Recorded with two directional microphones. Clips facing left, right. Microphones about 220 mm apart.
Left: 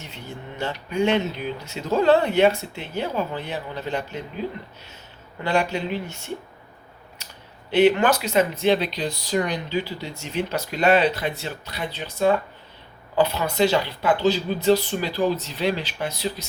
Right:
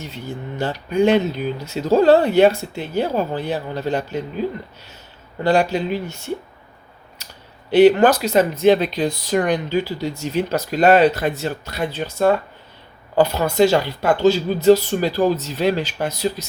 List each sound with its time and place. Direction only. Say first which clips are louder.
0.6 s speech: right 5 dB; 35° right (ahead or behind)
5.4 s speech: right 6 dB; 40° right (ahead or behind)
7.7 s speech: right 6 dB; 35° right (ahead or behind)